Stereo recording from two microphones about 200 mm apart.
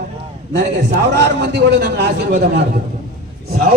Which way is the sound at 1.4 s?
55° right (ahead or behind).